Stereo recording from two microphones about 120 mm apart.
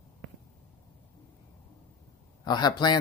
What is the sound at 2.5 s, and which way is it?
Speech, 35° left (ahead or behind).